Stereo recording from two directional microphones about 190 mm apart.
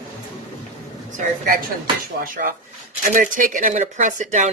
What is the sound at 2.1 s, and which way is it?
Speech, 45° right (ahead or behind).